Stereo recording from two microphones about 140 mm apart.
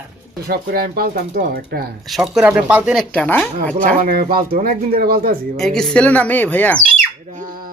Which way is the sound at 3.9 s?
90° right.